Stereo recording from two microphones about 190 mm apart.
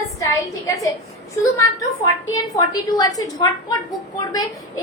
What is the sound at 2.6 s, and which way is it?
A woman's voice, 20° left (ahead or behind).